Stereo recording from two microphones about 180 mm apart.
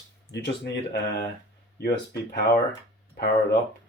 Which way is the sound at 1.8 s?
65° left (ahead or behind).